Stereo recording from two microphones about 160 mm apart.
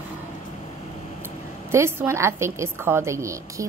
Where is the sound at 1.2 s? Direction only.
15° right (ahead or behind).